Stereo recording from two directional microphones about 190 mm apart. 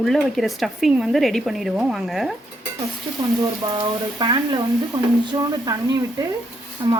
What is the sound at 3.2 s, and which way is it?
Speech, 25° right (ahead or behind).